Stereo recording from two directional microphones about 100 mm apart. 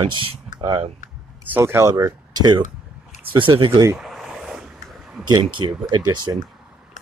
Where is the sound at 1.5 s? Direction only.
25° right (ahead or behind); by 2.6 s 45° right (ahead or behind).